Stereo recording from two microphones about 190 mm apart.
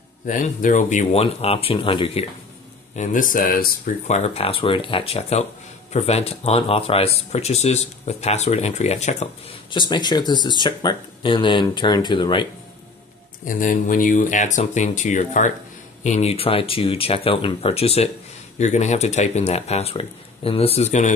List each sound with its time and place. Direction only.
0.3 s speech: 45° left (ahead or behind); by 2.2 s 30° left (ahead or behind)
3.0 s speech: 45° left (ahead or behind)
9.8 s speech: 25° left (ahead or behind)
13.6 s speech: 45° left (ahead or behind)